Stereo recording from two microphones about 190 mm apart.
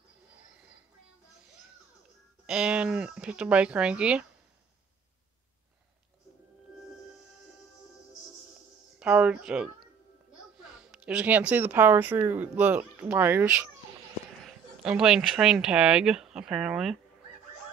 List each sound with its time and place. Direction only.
2.4 s speech: 5° right (ahead or behind)
9.0 s speech: 5° right (ahead or behind)